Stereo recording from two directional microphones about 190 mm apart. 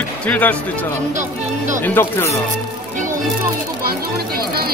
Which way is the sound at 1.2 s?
40° right (ahead or behind).